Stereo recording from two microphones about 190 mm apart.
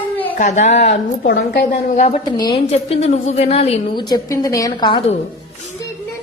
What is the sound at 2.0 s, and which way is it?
Speech, 35° left (ahead or behind).